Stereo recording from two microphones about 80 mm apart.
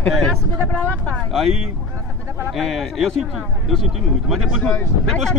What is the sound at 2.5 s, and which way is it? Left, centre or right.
A man's voice, centre.